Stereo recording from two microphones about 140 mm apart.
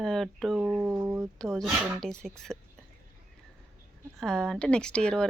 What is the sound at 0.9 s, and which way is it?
Speech, 20° right (ahead or behind).